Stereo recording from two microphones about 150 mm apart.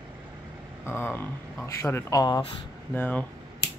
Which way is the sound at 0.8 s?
15° left (ahead or behind).